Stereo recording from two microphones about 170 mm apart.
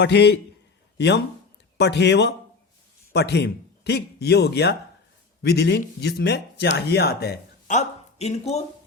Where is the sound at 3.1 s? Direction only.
80° left.